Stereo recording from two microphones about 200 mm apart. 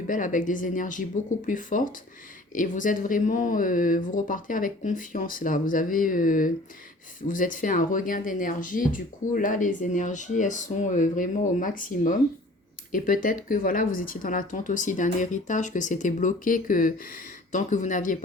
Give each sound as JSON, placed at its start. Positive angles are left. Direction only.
{"t": 0.1, "sound": "speech", "side_deg": 40}